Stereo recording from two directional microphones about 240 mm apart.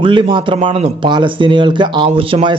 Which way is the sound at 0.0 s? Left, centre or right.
Centre.